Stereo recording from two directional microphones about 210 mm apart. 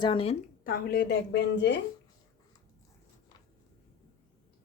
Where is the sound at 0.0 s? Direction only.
25° left (ahead or behind).